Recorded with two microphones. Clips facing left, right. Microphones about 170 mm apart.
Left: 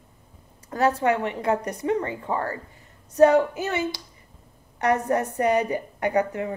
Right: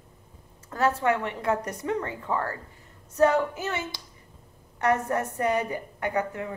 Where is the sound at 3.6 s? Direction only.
15° left (ahead or behind).